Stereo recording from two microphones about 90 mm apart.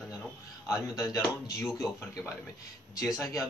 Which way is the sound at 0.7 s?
35° left (ahead or behind).